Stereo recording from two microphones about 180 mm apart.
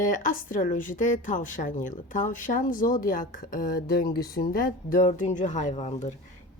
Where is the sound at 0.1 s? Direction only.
45° left (ahead or behind).